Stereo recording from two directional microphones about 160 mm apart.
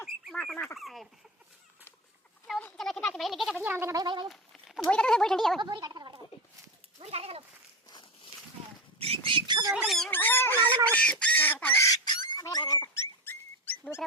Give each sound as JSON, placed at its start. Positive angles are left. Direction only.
{"t": 0.0, "sound": "fowl", "side_deg": 0}
{"t": 2.6, "sound": "speech", "side_deg": 5}
{"t": 4.3, "sound": "speech", "side_deg": 0}
{"t": 5.5, "sound": "a sound", "side_deg": -25}
{"t": 7.0, "sound": "speech", "side_deg": -40}
{"t": 9.0, "sound": "a sound", "side_deg": -35}
{"t": 9.8, "sound": "speech", "side_deg": 0}
{"t": 10.1, "sound": "a sound", "side_deg": 10}
{"t": 10.9, "sound": "speech", "side_deg": 5}
{"t": 12.8, "sound": "dog", "side_deg": 10}